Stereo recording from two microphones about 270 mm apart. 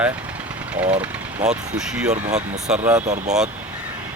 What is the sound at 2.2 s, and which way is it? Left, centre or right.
Speech, right.